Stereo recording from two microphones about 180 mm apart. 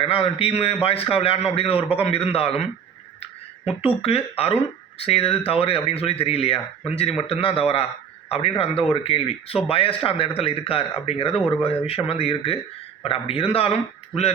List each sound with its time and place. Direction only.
0.0 s speech: 30° left (ahead or behind)
3.8 s speech: 30° left (ahead or behind)